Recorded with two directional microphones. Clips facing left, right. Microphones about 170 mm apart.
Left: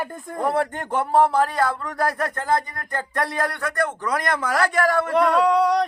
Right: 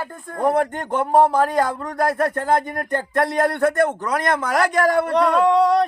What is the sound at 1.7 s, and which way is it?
Speech, 45° right (ahead or behind).